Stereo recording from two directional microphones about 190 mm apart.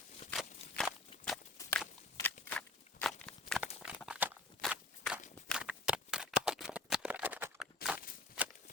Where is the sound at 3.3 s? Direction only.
5° left (ahead or behind).